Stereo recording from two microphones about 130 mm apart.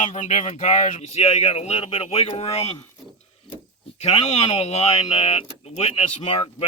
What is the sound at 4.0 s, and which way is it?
Speech, 55° left (ahead or behind).